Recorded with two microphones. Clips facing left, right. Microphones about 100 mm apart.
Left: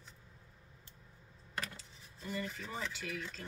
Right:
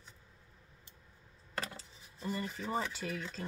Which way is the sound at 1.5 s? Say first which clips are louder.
Right 2 dB; 30° right (ahead or behind).